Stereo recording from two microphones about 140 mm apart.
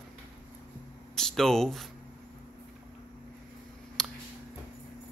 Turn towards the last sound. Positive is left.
turn(degrees=5)  # may be behind; listen again after turning